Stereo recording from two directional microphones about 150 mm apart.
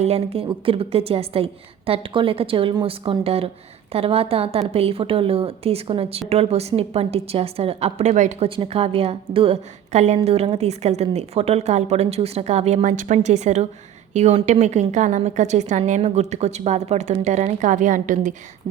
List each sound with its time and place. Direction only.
0.0 s a woman's voice: 45° right (ahead or behind)
8.4 s a woman's voice: 35° right (ahead or behind); by 18.3 s 60° right (ahead or behind)